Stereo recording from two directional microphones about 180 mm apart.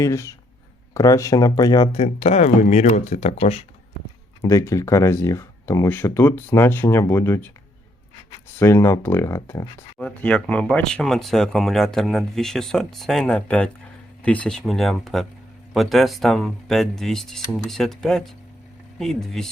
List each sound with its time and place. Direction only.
0.0 s speech: 15° left (ahead or behind); by 3.7 s 35° left (ahead or behind)
4.4 s speech: 15° left (ahead or behind)
8.5 s speech: 15° left (ahead or behind)